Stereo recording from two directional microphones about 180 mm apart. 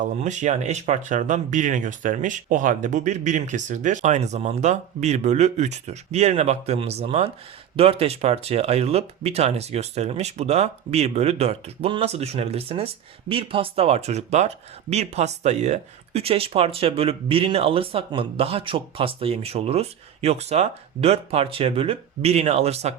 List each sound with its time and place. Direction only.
0.0 s speech: 40° right (ahead or behind)